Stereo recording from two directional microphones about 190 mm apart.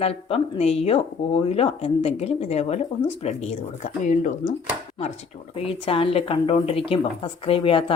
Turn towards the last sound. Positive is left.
turn(degrees=30)  # may be behind; listen again after turning